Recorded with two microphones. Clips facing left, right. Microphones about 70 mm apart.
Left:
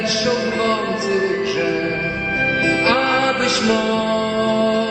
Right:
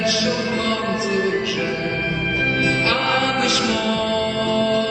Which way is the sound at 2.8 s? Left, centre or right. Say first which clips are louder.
Left 3 dB; left.